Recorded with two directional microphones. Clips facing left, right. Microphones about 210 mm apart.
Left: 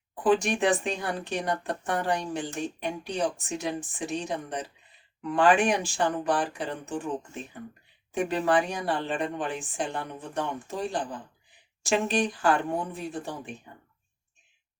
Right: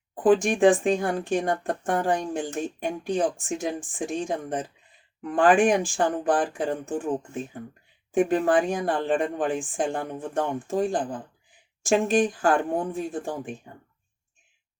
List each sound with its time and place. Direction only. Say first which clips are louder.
0.2 s a woman's voice: right 5 dB; 50° right (ahead or behind)
8.1 s a woman's voice: right 4 dB; 50° right (ahead or behind)